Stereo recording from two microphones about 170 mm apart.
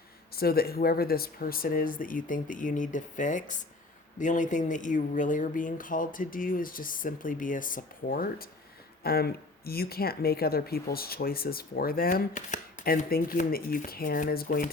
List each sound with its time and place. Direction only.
0.3 s speech: 65° left (ahead or behind)